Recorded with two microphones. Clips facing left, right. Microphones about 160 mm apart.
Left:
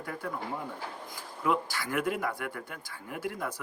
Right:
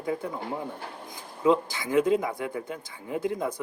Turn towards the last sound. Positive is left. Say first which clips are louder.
# right 7 dB
turn(degrees=-20)  # may be behind; listen again after turning